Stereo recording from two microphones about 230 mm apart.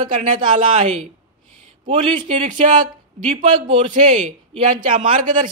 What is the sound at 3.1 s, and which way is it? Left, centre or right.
Speech, right.